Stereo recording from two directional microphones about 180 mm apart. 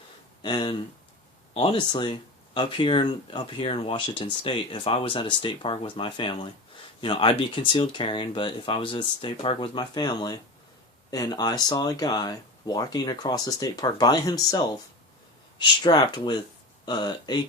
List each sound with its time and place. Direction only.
0.4 s speech: 25° left (ahead or behind)